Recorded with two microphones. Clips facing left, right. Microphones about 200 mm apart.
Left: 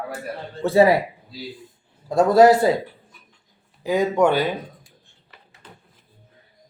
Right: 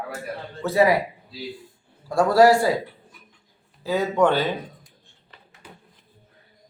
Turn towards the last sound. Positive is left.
turn(degrees=-10)  # may be behind; listen again after turning